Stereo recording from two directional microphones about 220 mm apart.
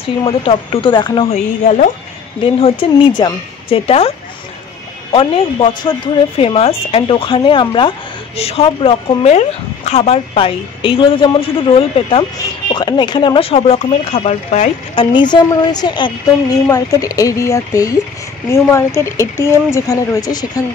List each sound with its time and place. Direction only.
0.2 s speech: 25° left (ahead or behind)
2.4 s speech: 25° left (ahead or behind)
5.1 s speech: 25° left (ahead or behind)